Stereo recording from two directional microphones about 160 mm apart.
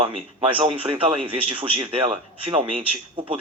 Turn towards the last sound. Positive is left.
turn(degrees=-35)  # may be behind; listen again after turning